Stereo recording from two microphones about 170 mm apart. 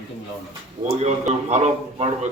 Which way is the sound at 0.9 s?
40° right (ahead or behind).